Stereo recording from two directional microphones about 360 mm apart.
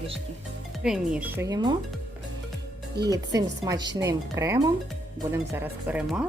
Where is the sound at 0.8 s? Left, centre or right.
Centre.